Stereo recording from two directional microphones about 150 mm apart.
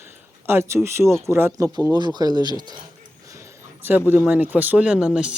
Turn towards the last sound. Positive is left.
turn(degrees=-5)  # may be behind; listen again after turning